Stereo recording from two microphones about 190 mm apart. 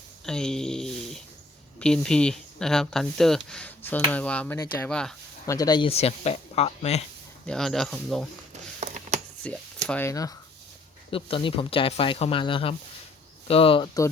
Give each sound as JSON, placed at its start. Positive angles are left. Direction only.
{"t": 0.3, "sound": "a sound", "side_deg": 5}
{"t": 1.8, "sound": "speech", "side_deg": 5}
{"t": 5.5, "sound": "speech", "side_deg": 20}
{"t": 7.4, "sound": "speech", "side_deg": 5}
{"t": 8.8, "sound": "a sound", "side_deg": -35}
{"t": 9.4, "sound": "speech", "side_deg": 5}
{"t": 11.1, "sound": "speech", "side_deg": 25}